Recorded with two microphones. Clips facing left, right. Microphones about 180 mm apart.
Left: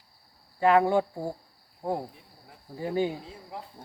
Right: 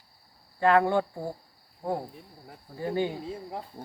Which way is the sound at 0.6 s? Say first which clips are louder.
Left 1 dB; 10° left (ahead or behind).